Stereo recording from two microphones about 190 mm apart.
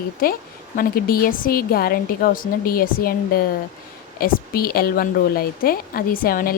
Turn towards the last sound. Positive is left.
turn(degrees=50)  # may be behind; listen again after turning